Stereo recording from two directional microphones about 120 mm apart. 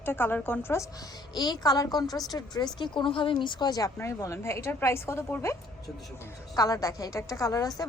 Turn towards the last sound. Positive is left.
turn(degrees=25)  # may be behind; listen again after turning